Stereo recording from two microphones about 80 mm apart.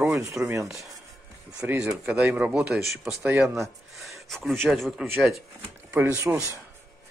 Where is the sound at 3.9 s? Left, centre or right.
Centre.